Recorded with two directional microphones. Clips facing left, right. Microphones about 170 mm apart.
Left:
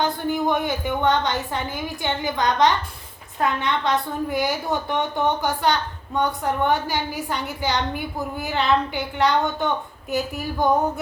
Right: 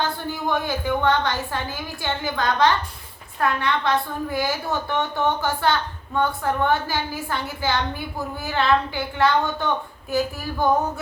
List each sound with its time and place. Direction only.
0.0 s a woman's voice: 20° left (ahead or behind)